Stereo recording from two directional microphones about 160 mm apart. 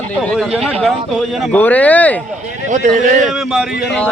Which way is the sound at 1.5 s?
10° left (ahead or behind).